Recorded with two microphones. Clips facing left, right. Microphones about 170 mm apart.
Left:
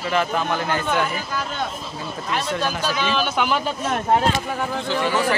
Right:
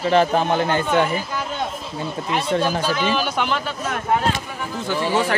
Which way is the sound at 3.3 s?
5° left (ahead or behind).